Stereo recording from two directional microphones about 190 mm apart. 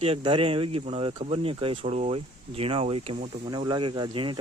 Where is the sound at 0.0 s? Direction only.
30° right (ahead or behind).